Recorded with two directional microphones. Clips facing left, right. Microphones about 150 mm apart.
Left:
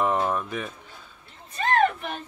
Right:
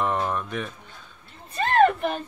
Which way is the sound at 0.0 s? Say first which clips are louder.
Left 1 dB; 5° left (ahead or behind).